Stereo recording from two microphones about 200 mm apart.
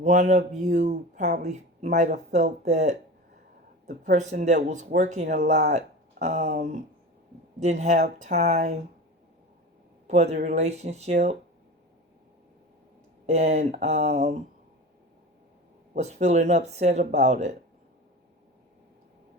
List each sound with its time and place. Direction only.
0.0 s a woman's voice: 35° right (ahead or behind)
4.0 s speech: 35° right (ahead or behind)
7.6 s speech: 35° right (ahead or behind)
10.1 s speech: 35° right (ahead or behind)
13.2 s speech: 35° right (ahead or behind)
16.0 s speech: 35° right (ahead or behind)